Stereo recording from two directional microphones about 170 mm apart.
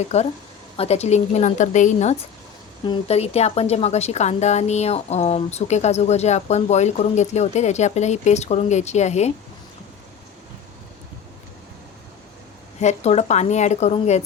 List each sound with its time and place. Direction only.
0.1 s a woman's voice: 40° left (ahead or behind)
2.8 s a woman's voice: 35° left (ahead or behind)
12.8 s a woman's voice: 40° left (ahead or behind)